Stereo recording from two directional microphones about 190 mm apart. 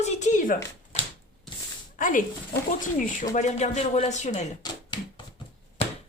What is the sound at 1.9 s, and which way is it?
Speech, 45° left (ahead or behind).